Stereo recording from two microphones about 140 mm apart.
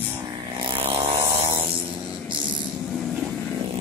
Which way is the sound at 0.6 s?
35° right (ahead or behind).